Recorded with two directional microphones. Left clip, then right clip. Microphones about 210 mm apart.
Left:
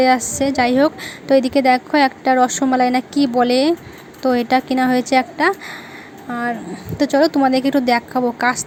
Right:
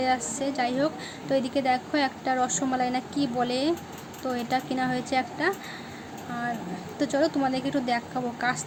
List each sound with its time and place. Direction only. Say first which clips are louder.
0.0 s a woman's voice: left 11 dB; 45° left (ahead or behind)
6.9 s speech: left 10 dB; 40° left (ahead or behind)